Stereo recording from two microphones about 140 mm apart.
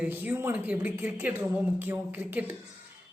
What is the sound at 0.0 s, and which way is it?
Speech, 15° right (ahead or behind).